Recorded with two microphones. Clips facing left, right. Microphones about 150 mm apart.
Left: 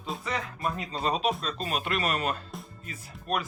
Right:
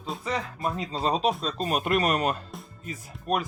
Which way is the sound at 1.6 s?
45° right (ahead or behind).